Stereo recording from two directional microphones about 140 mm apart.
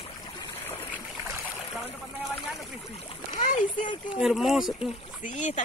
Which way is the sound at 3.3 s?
65° left (ahead or behind).